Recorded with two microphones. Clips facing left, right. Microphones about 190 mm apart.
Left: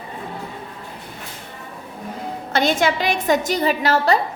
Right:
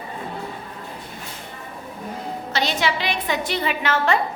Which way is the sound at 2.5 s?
50° left (ahead or behind).